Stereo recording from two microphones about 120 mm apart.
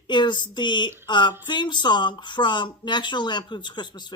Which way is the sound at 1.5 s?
40° left (ahead or behind).